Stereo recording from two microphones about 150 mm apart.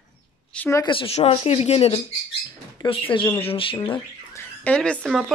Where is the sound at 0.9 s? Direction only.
40° left (ahead or behind).